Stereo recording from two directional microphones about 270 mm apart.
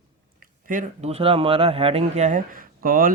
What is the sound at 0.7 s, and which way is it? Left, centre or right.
Speech, right.